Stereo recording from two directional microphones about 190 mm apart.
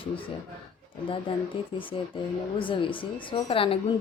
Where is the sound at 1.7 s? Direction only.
25° left (ahead or behind).